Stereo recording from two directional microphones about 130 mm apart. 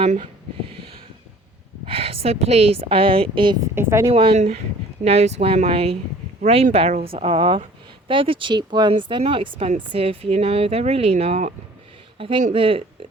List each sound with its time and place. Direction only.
1.8 s a woman's voice: 50° right (ahead or behind)
3.8 s speech: 20° right (ahead or behind)
4.1 s a woman's voice: 45° right (ahead or behind)
4.4 s a woman's voice: 60° right (ahead or behind); by 13.1 s 45° right (ahead or behind)